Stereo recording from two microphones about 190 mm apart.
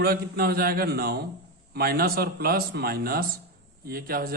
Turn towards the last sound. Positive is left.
turn(degrees=-50)  # may be behind; listen again after turning